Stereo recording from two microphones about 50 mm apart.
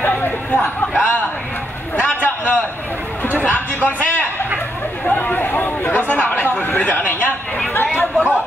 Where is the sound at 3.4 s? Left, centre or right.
Left.